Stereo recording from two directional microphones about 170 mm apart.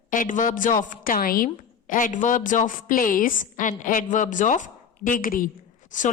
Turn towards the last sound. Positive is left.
turn(degrees=50)  # may be behind; listen again after turning